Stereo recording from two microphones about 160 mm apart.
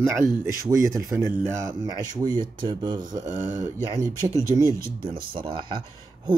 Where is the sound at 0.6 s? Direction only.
20° right (ahead or behind).